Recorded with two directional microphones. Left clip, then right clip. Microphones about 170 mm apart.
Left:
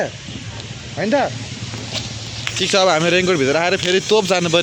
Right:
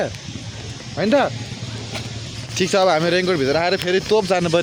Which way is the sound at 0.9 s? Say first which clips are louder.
Right 1 dB; 25° right (ahead or behind).